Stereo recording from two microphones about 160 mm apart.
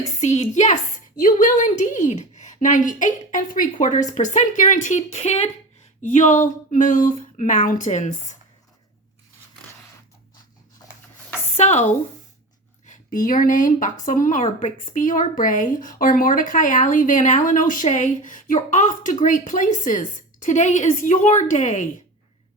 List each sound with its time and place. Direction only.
0.2 s speech: 45° left (ahead or behind)
11.5 s speech: 45° left (ahead or behind)